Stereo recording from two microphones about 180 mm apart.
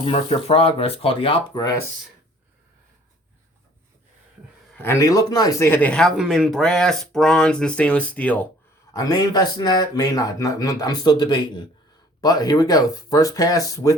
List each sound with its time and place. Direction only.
0.0 s speech: 35° left (ahead or behind)
4.8 s speech: 15° left (ahead or behind)
8.9 s speech: 20° left (ahead or behind)